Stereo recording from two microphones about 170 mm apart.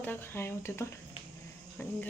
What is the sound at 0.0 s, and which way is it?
A woman's voice, 10° left (ahead or behind).